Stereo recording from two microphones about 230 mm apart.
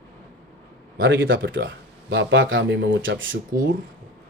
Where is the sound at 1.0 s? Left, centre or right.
Right.